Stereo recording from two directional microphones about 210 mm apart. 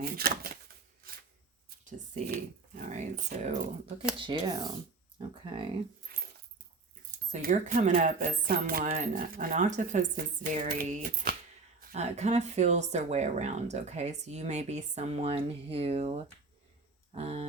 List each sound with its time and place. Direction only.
0.0 s speech: 45° right (ahead or behind)
2.2 s dog: 45° right (ahead or behind)
4.2 s speech: 20° right (ahead or behind)
5.3 s a sound: 25° right (ahead or behind)
7.3 s speech: 40° right (ahead or behind)